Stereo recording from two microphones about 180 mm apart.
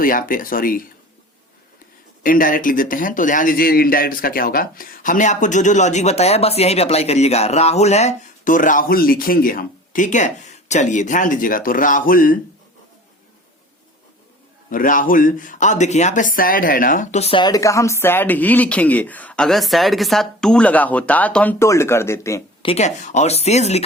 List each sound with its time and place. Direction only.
0.0 s speech: 50° left (ahead or behind)
2.2 s speech: 50° left (ahead or behind)
14.7 s speech: 50° left (ahead or behind)
17.4 s speech: 20° left (ahead or behind)
22.6 s speech: 35° left (ahead or behind)